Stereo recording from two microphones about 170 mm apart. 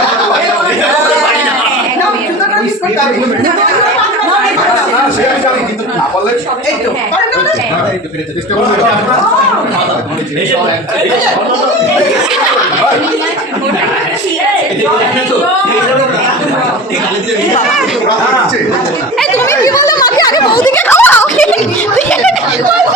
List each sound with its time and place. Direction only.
19.5 s a sound: 20° left (ahead or behind)
20.1 s speech: 25° left (ahead or behind)
20.7 s speech: 10° left (ahead or behind)